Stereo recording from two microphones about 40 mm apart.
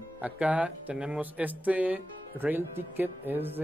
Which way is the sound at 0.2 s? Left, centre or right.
Right.